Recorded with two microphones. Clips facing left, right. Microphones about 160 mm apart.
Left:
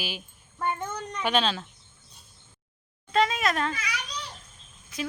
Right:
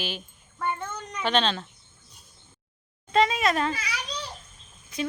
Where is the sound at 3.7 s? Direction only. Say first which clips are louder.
Right 1 dB; 35° right (ahead or behind).